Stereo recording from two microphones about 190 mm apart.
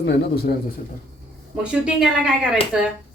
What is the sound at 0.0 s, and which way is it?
Speech, 60° left (ahead or behind).